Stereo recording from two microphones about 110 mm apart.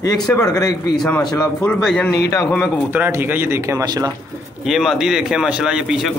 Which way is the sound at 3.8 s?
35° right (ahead or behind).